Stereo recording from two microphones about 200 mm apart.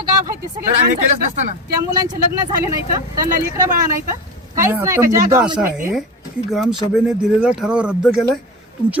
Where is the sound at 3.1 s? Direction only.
15° right (ahead or behind).